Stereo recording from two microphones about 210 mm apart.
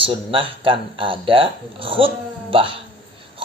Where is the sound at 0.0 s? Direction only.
25° right (ahead or behind).